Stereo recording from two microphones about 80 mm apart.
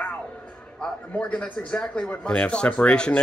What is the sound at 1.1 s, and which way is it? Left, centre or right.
Speech, centre.